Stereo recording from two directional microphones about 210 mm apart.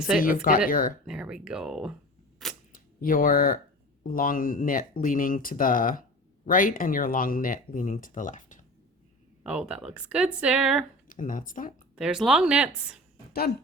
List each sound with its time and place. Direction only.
0.3 s speech: 40° left (ahead or behind)
1.0 s speech: 5° right (ahead or behind)
2.4 s camera: centre (ahead or behind)
2.7 s speech: 40° left (ahead or behind)
9.4 s speech: 5° right (ahead or behind)
11.1 s speech: 40° left (ahead or behind)
11.9 s speech: 5° right (ahead or behind)